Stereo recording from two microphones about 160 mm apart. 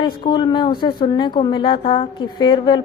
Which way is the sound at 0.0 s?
30° left (ahead or behind).